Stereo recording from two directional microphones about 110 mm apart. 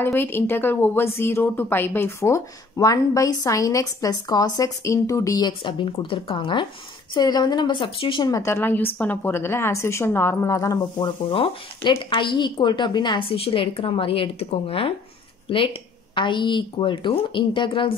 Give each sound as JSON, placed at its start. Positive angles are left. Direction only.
{"t": 0.0, "sound": "a woman's voice", "side_deg": 20}
{"t": 5.5, "sound": "a woman's voice", "side_deg": 50}
{"t": 8.3, "sound": "a woman's voice", "side_deg": 25}
{"t": 11.2, "sound": "speech", "side_deg": 55}
{"t": 13.4, "sound": "speech", "side_deg": 55}